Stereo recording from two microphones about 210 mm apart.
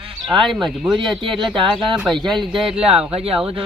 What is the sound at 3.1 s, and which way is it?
Speech, 25° right (ahead or behind).